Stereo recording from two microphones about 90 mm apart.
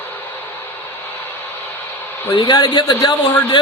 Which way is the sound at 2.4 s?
50° left (ahead or behind).